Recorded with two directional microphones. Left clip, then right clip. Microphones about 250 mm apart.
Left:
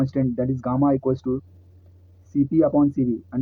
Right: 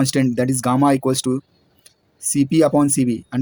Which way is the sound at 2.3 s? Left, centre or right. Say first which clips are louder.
Right 4 dB; right.